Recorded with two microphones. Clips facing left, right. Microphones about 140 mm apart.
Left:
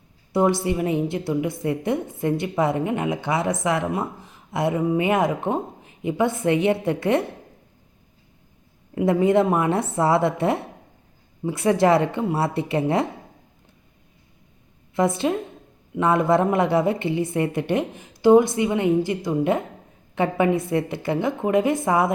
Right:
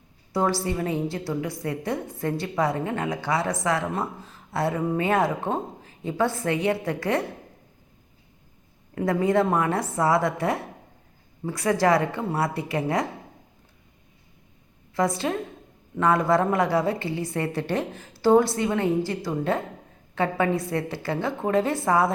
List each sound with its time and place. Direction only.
0.3 s a woman's voice: 20° left (ahead or behind)
9.0 s a woman's voice: 20° left (ahead or behind)
14.9 s a woman's voice: 25° left (ahead or behind)